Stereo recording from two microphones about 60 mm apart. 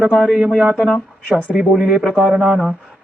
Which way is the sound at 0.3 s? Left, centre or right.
Centre.